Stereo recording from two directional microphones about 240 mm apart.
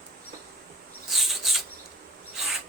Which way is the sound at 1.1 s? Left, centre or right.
Centre.